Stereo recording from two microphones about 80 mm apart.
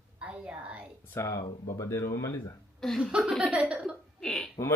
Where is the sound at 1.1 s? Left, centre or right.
Left.